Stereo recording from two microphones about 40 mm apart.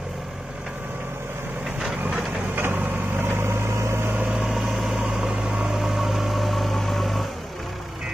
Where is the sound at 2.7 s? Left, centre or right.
Right.